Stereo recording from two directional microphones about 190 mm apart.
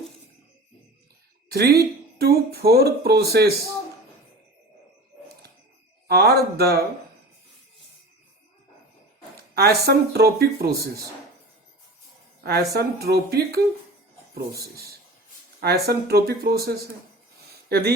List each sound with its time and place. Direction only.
2.1 s speech: 55° right (ahead or behind)
6.1 s speech: 55° right (ahead or behind)
9.6 s speech: 55° right (ahead or behind)
12.4 s speech: 55° right (ahead or behind)
15.6 s speech: 55° right (ahead or behind)